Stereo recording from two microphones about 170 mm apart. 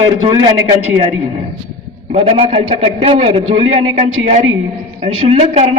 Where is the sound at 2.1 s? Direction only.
35° right (ahead or behind).